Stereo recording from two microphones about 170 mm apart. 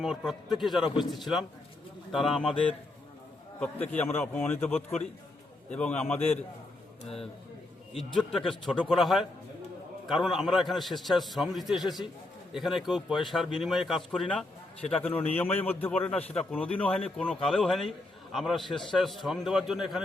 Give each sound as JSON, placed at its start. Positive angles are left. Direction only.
{"t": 0.0, "sound": "a man's voice", "side_deg": 0}
{"t": 4.0, "sound": "a man's voice", "side_deg": 5}
{"t": 6.1, "sound": "a man's voice", "side_deg": 35}
{"t": 7.9, "sound": "a man's voice", "side_deg": 0}